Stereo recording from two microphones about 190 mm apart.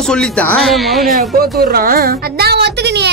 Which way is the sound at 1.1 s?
55° right (ahead or behind).